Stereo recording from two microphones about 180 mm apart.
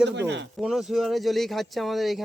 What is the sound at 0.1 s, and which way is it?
Speech, 75° right (ahead or behind).